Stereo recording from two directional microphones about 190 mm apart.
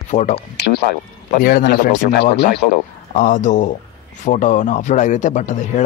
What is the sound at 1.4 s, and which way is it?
A man's voice, 50° left (ahead or behind).